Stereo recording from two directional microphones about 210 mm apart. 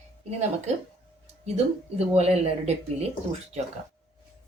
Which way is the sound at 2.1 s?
30° right (ahead or behind).